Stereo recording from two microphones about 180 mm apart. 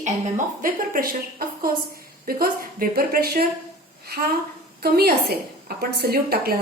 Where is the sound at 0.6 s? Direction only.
50° right (ahead or behind).